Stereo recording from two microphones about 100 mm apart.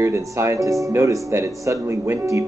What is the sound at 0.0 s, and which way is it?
A man's voice, 30° right (ahead or behind).